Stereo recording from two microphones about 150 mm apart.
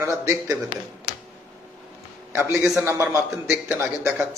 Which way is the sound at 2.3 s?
15° right (ahead or behind).